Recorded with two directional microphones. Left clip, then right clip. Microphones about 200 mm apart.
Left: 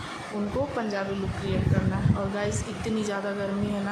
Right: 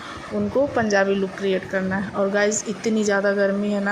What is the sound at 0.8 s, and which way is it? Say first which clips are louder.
Speech: right 10 dB; 30° right (ahead or behind).